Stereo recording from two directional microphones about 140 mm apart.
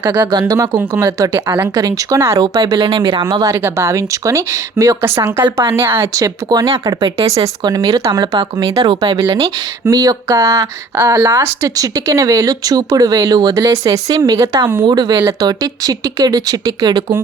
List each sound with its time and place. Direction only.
0.3 s speech: 30° right (ahead or behind)
1.7 s speech: 25° right (ahead or behind)
2.6 s speech: 35° right (ahead or behind)